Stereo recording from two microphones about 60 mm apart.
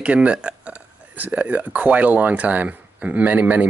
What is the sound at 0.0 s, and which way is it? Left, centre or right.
Speech, right.